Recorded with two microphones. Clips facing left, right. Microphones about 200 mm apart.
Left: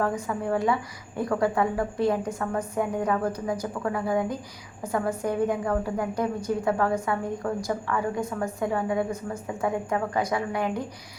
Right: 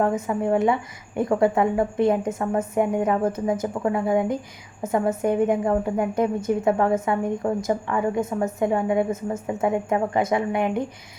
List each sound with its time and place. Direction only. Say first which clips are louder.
0.0 s a woman's voice: right 5 dB; 25° right (ahead or behind)